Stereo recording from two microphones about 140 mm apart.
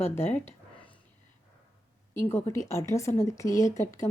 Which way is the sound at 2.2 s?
20° left (ahead or behind).